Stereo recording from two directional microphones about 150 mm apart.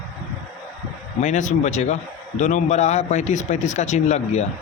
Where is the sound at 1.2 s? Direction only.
50° left (ahead or behind).